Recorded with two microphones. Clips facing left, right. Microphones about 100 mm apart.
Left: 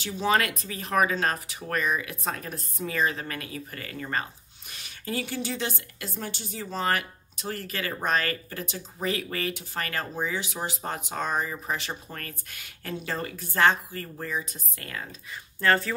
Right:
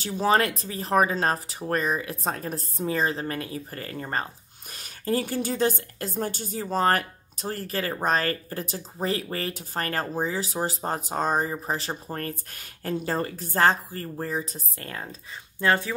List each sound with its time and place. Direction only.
0.0 s speech: 40° right (ahead or behind)
15.6 s speech: 15° right (ahead or behind)